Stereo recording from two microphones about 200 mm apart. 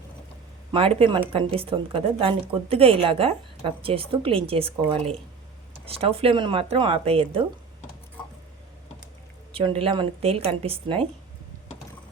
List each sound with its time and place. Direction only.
0.7 s speech: 30° right (ahead or behind)
9.5 s speech: 30° right (ahead or behind)